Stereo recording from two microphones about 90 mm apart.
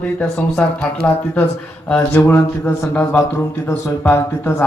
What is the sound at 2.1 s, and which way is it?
Speech, 25° left (ahead or behind).